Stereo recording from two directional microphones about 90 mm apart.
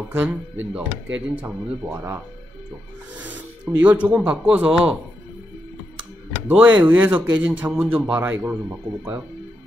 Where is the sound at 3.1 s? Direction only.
15° right (ahead or behind).